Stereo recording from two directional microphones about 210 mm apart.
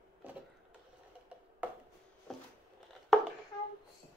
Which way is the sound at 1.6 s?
10° right (ahead or behind).